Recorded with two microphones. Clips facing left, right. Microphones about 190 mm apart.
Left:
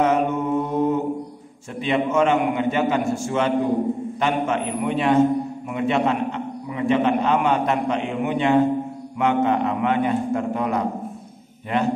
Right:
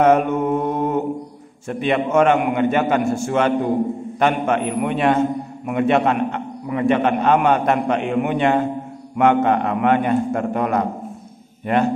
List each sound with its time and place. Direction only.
0.0 s mantra: 55° right (ahead or behind)
1.7 s a man's voice: 60° right (ahead or behind)